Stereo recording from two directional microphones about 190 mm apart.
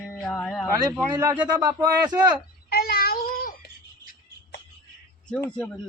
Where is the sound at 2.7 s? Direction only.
50° left (ahead or behind).